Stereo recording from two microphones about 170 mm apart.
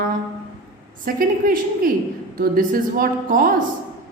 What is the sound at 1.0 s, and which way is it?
A woman's voice, 55° right (ahead or behind).